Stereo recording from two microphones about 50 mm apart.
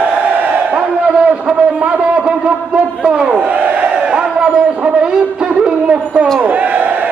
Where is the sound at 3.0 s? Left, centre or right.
Centre.